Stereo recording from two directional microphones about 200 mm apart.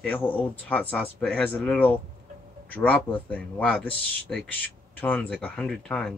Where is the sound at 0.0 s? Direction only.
10° left (ahead or behind).